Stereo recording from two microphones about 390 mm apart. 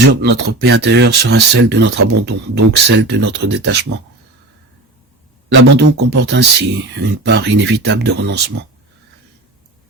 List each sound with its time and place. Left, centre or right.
0.1 s speech: right
5.5 s speech: right